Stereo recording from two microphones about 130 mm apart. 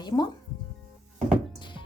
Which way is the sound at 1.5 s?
35° left (ahead or behind).